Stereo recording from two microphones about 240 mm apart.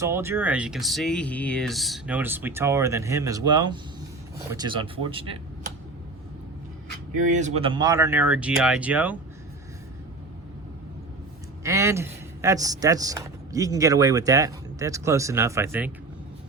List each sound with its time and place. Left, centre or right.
0.0 s a man's voice: centre
7.3 s a man's voice: right; by 9.1 s centre
11.6 s a man's voice: centre